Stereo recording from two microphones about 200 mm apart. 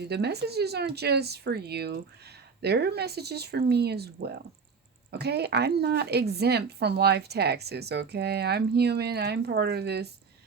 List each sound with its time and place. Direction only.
0.1 s speech: 55° right (ahead or behind)